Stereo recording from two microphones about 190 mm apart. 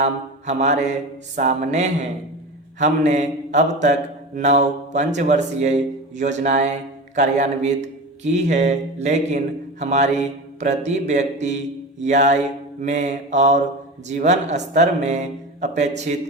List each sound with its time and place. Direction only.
0.0 s speech: 40° right (ahead or behind)